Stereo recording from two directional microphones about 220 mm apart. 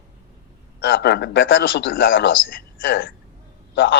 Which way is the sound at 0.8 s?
50° left (ahead or behind).